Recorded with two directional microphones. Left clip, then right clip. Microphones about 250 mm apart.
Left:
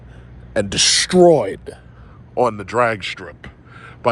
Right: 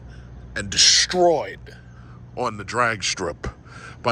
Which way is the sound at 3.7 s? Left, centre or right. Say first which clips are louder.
Left 5 dB; centre.